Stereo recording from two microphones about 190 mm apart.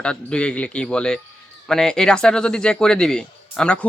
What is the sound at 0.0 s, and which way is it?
A man's voice, 5° left (ahead or behind).